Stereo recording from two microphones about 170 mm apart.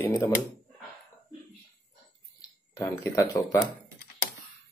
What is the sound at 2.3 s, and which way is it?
Speech, 20° left (ahead or behind).